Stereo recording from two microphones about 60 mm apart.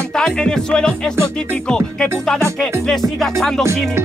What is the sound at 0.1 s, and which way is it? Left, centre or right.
Music, centre.